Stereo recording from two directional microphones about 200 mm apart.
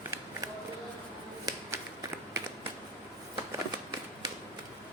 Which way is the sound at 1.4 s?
15° right (ahead or behind).